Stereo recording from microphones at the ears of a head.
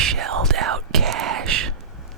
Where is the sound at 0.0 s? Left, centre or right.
Right.